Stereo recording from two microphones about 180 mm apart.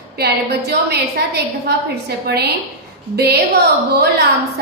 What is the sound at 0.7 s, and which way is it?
Speech, 60° right (ahead or behind).